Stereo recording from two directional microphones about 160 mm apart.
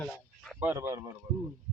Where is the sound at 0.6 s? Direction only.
15° right (ahead or behind).